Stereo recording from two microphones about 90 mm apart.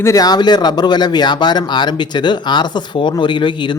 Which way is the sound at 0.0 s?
40° left (ahead or behind).